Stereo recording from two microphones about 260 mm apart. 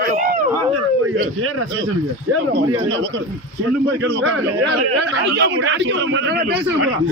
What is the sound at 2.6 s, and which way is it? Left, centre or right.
Speech, right.